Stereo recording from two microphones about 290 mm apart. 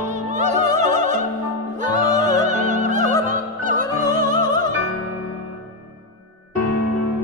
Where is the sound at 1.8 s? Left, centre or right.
Right.